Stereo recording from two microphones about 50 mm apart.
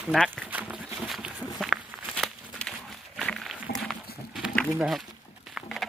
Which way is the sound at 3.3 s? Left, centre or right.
Centre.